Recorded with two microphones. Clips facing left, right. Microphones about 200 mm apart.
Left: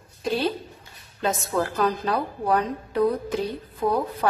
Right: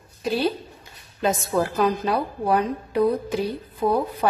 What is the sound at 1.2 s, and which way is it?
A woman's voice, 15° right (ahead or behind).